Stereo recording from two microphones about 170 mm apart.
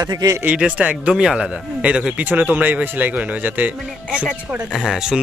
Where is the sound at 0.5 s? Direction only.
5° right (ahead or behind).